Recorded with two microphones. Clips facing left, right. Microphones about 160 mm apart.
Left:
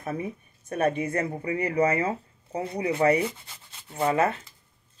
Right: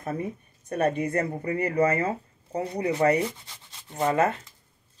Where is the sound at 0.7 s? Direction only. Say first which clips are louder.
Even; 40° right (ahead or behind).